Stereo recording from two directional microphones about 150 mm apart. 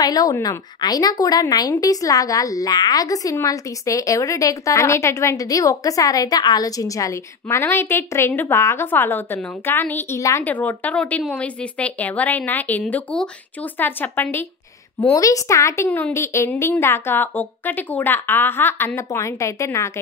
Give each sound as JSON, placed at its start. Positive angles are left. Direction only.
{"t": 0.0, "sound": "a woman's voice", "side_deg": 25}